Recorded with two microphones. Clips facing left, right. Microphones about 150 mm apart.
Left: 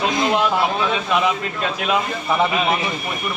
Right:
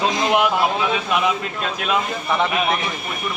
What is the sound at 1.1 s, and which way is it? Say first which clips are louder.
A man's voice: left 1 dB; 5° right (ahead or behind).